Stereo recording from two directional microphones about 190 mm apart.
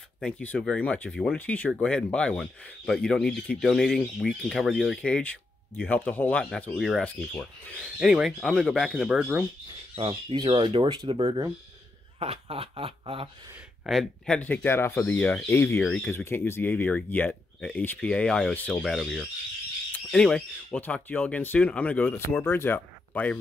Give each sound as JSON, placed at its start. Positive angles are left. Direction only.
{"t": 0.2, "sound": "speech", "side_deg": 5}
{"t": 9.9, "sound": "speech", "side_deg": -30}
{"t": 13.8, "sound": "speech", "side_deg": 0}